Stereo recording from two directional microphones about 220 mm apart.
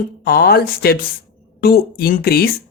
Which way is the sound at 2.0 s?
45° left (ahead or behind).